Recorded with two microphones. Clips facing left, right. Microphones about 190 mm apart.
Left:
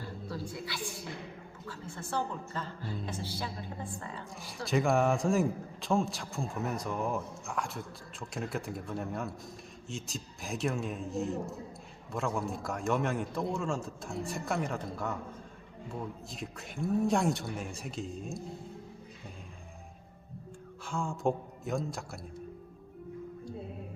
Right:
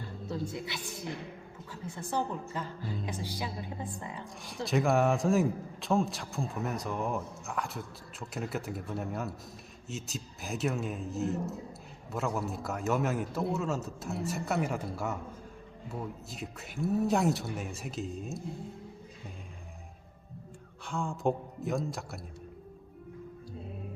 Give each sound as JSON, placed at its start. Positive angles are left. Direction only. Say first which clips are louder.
{"t": 0.3, "sound": "a woman's voice", "louder": "right 4 dB", "side_deg": -20}
{"t": 4.4, "sound": "a man's voice", "louder": "right 1 dB", "side_deg": 0}
{"t": 20.8, "sound": "a man's voice", "louder": "right 1 dB", "side_deg": 0}